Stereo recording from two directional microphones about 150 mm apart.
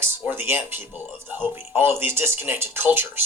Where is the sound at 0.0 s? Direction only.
15° right (ahead or behind).